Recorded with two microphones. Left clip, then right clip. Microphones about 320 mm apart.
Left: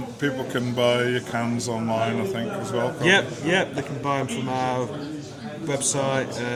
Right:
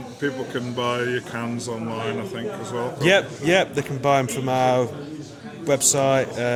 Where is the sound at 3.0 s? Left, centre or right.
Right.